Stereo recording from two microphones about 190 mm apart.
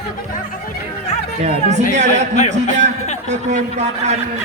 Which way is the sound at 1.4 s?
35° right (ahead or behind).